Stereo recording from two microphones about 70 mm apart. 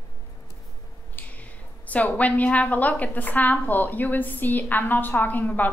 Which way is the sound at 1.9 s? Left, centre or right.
Left.